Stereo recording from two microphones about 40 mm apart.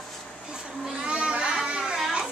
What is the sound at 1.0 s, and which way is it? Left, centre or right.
Speech, right.